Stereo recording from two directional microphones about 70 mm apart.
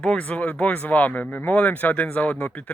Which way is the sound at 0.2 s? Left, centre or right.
Left.